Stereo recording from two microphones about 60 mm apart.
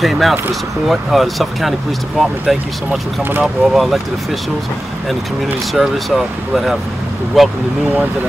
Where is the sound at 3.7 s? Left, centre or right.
Centre.